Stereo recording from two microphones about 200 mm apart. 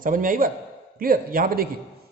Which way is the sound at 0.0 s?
45° right (ahead or behind).